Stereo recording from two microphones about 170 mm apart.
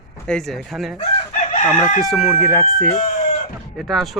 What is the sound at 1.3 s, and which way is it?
Chicken, 50° left (ahead or behind).